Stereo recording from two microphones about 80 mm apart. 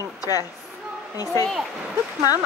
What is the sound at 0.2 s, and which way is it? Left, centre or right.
A woman's voice, left.